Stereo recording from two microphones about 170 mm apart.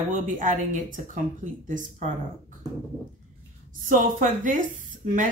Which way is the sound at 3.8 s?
50° right (ahead or behind).